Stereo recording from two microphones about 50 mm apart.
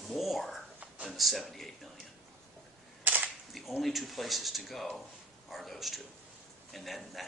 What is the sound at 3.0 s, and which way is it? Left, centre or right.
Cap gun, right.